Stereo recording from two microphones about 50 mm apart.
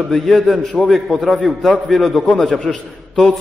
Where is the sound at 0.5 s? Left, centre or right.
Left.